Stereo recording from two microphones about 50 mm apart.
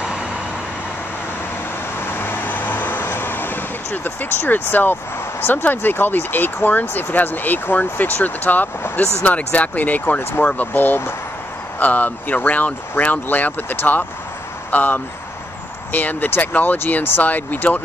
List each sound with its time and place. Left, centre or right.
2.0 s vehicle: left
5.4 s speech: left
16.7 s speech: left
17.2 s speech: left